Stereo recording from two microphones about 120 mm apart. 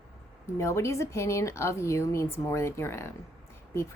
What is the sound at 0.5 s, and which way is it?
A woman's voice, 25° left (ahead or behind).